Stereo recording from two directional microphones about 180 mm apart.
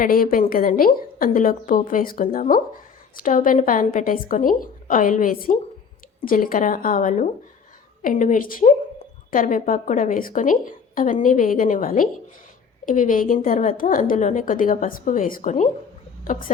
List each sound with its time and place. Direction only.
0.0 s a woman's voice: 50° left (ahead or behind)